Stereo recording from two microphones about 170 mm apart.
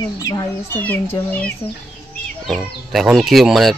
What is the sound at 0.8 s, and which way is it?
A child's voice, 10° left (ahead or behind).